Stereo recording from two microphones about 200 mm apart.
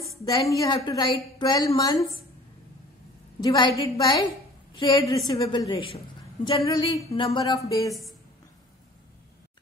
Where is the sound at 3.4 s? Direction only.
20° left (ahead or behind).